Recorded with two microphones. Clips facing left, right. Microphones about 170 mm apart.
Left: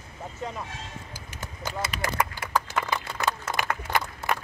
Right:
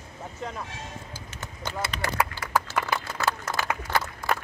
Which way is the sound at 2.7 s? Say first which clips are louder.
Right 1 dB; 15° left (ahead or behind).